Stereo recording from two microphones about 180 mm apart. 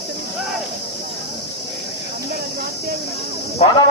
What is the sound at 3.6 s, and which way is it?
Speech, 35° left (ahead or behind).